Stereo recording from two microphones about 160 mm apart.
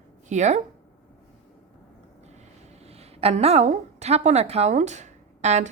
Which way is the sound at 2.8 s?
40° right (ahead or behind).